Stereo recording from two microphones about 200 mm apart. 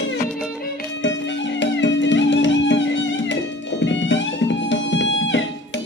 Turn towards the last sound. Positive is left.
turn(degrees=70)  # may be behind; listen again after turning